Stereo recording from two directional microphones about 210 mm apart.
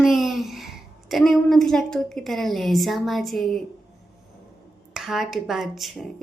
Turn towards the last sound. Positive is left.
turn(degrees=0)  # may be behind; listen again after turning